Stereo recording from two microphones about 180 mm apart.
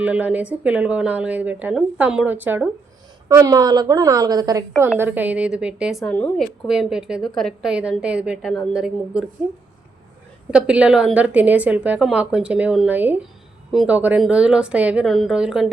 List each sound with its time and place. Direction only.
0.0 s a woman's voice: 5° right (ahead or behind)
4.9 s a woman's voice: 10° right (ahead or behind)
10.5 s a woman's voice: 5° right (ahead or behind)